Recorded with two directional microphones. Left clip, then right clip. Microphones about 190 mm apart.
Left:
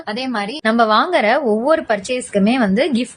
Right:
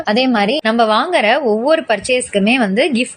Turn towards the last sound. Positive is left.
turn(degrees=0)  # may be behind; listen again after turning